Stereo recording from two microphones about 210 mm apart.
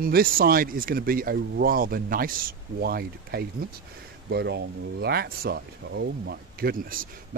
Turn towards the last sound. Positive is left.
turn(degrees=-45)  # may be behind; listen again after turning